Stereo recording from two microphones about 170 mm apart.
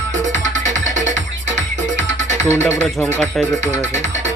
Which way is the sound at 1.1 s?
90° right.